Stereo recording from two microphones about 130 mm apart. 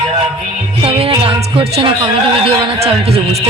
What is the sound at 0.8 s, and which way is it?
Speech, 45° right (ahead or behind).